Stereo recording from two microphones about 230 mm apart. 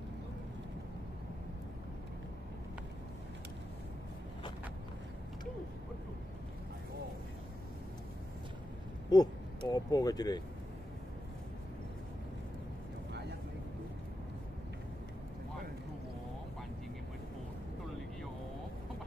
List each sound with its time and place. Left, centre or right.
9.1 s speech: centre